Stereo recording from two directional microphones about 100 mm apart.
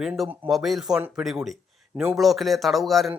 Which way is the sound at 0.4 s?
Centre (ahead or behind).